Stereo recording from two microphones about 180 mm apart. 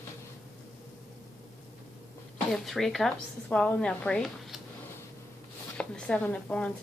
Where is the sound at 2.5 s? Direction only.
Centre (ahead or behind).